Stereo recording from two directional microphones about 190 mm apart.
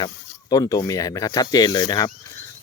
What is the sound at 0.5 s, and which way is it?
Speech, 20° left (ahead or behind).